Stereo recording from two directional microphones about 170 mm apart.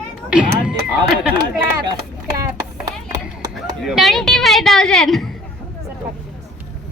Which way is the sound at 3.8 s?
Centre (ahead or behind).